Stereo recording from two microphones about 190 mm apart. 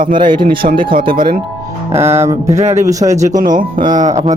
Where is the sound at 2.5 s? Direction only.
35° right (ahead or behind).